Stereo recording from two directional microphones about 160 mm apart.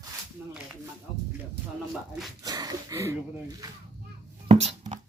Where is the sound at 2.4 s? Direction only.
25° right (ahead or behind).